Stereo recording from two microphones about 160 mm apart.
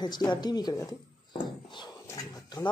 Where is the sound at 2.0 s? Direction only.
20° left (ahead or behind).